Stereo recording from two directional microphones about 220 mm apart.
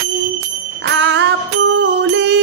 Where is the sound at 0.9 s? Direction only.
55° right (ahead or behind).